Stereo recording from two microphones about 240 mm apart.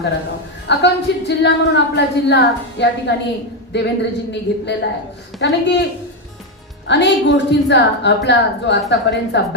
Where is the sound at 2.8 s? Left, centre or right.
Left.